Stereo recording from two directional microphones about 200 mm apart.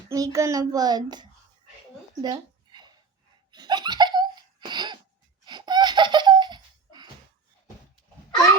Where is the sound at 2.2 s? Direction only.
20° right (ahead or behind).